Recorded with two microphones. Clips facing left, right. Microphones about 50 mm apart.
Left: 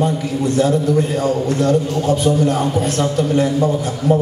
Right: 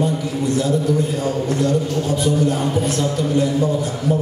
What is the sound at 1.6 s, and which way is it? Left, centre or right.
A man's voice, left.